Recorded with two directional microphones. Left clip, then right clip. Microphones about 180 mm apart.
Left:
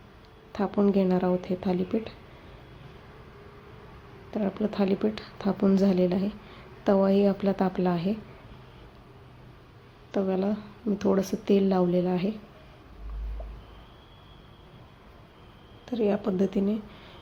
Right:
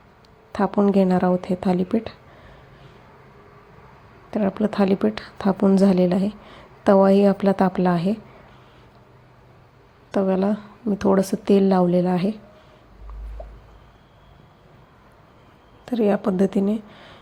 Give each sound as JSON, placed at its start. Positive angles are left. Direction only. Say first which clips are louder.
{"t": 0.5, "sound": "a woman's voice", "louder": "right 6 dB", "side_deg": -30}
{"t": 4.3, "sound": "a woman's voice", "louder": "right 7 dB", "side_deg": -30}
{"t": 10.1, "sound": "a woman's voice", "louder": "right 7 dB", "side_deg": -30}
{"t": 15.9, "sound": "speech", "louder": "right 6 dB", "side_deg": -35}